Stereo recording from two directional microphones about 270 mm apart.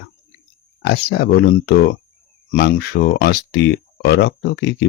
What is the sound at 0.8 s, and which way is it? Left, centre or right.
Speech, left.